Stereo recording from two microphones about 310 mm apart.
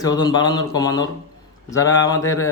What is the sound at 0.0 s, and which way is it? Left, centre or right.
Speech, centre.